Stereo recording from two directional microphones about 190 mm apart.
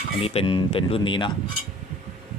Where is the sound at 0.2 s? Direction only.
30° left (ahead or behind).